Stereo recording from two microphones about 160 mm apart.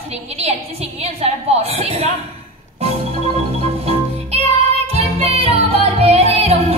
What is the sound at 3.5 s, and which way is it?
Music, 40° right (ahead or behind).